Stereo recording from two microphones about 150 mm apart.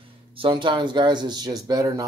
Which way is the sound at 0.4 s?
35° right (ahead or behind).